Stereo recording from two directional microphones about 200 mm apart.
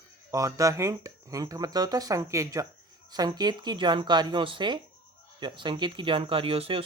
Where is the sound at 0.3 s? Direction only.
15° right (ahead or behind).